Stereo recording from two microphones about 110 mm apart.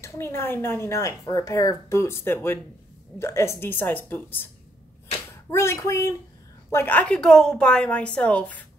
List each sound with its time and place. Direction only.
0.0 s speech: 25° left (ahead or behind)
5.5 s a woman's voice: 25° left (ahead or behind)